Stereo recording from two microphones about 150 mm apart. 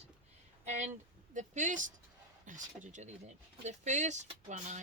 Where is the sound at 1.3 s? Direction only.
55° right (ahead or behind).